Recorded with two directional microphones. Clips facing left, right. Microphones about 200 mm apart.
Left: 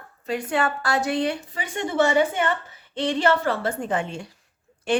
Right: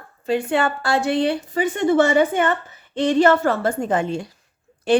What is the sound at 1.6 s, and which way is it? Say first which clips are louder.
A woman's voice: right 7 dB; 55° right (ahead or behind).